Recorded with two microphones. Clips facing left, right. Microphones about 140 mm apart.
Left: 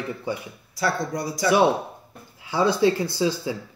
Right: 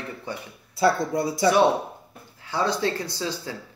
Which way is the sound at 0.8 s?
25° right (ahead or behind).